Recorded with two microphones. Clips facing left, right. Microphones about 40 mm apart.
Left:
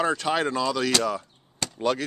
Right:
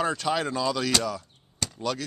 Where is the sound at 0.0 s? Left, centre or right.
Centre.